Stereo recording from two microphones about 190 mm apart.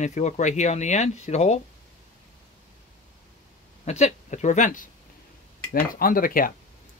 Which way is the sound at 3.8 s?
35° left (ahead or behind).